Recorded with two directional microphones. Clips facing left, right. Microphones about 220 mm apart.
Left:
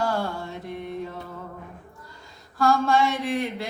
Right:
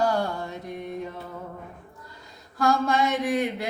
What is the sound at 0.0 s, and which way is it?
Mantra, 20° right (ahead or behind).